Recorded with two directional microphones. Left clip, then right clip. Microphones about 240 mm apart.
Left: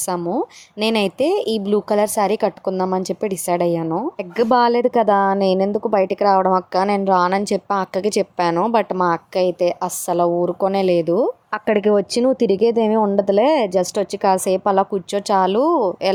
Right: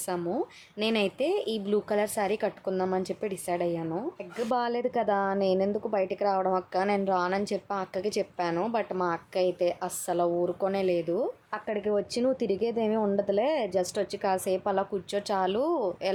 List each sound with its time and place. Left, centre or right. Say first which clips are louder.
0.0 s a woman's voice: left 9 dB; left